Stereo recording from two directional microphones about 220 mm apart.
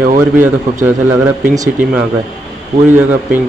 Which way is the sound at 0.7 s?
35° right (ahead or behind).